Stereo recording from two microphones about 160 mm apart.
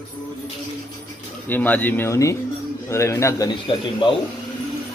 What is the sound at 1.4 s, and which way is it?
Speech, 10° left (ahead or behind).